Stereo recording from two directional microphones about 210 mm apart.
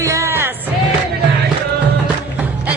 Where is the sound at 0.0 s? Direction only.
15° right (ahead or behind).